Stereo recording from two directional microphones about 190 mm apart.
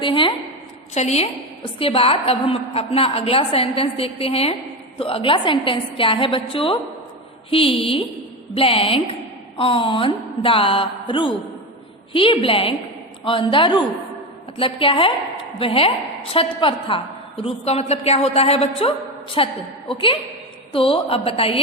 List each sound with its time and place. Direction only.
0.0 s a woman's voice: 25° left (ahead or behind)